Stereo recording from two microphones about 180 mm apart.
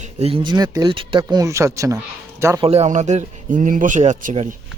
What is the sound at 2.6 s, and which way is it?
Speech, 35° right (ahead or behind).